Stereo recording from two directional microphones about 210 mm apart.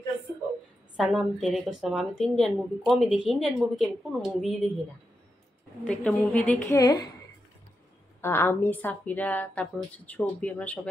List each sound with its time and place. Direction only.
0.9 s a woman's voice: centre (ahead or behind)
5.9 s a woman's voice: 5° left (ahead or behind)
6.8 s a woman's voice: 20° left (ahead or behind)
8.2 s a woman's voice: 10° left (ahead or behind)